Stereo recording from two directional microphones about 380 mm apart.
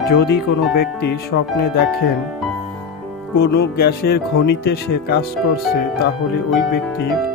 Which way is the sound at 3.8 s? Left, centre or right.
Left.